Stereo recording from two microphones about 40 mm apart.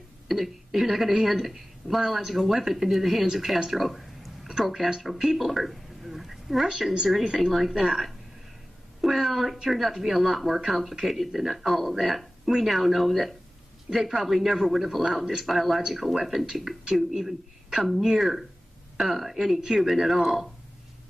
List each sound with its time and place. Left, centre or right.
0.3 s a woman's voice: centre
3.7 s a sound: centre
5.0 s a woman's voice: centre
6.7 s a woman's voice: centre
7.3 s a woman's voice: centre